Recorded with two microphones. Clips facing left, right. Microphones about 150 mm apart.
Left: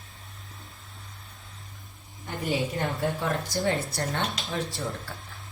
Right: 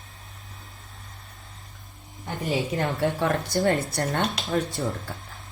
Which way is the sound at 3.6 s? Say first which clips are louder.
Right 5 dB; 50° right (ahead or behind).